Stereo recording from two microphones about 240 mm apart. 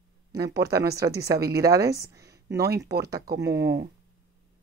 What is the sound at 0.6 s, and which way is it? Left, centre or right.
Speech, centre.